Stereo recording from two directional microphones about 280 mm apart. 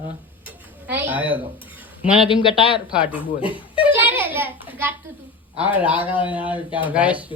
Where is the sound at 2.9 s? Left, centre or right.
Centre.